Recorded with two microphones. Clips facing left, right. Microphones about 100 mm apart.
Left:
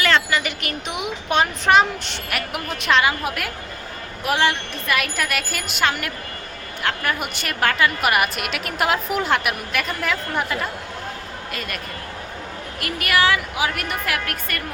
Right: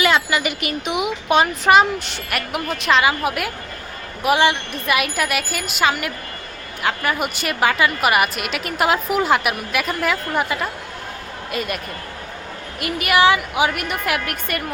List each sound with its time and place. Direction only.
0.0 s a woman's voice: 10° right (ahead or behind)
12.8 s a woman's voice: 20° right (ahead or behind)